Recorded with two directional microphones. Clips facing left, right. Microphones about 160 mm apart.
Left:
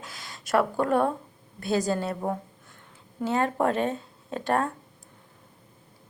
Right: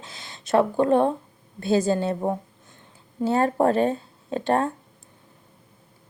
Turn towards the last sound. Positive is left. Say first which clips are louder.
# right 4 dB
turn(degrees=-30)  # may be behind; listen again after turning